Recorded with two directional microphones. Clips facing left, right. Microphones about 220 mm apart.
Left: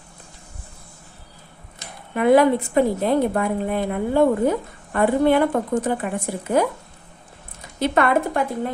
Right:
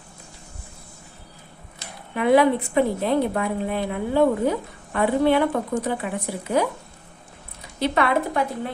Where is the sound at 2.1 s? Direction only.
45° left (ahead or behind).